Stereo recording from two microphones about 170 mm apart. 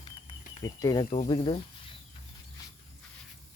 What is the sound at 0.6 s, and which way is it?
Speech, 20° left (ahead or behind).